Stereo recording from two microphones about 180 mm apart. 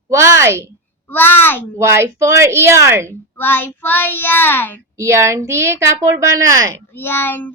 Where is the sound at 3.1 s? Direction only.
10° left (ahead or behind).